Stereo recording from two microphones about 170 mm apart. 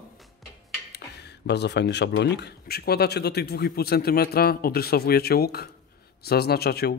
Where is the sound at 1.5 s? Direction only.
85° left.